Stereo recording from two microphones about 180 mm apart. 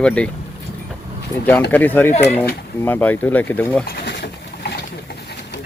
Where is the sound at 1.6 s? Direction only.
10° left (ahead or behind).